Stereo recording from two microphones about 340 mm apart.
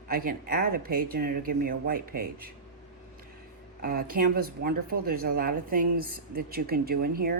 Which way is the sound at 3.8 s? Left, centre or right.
Right.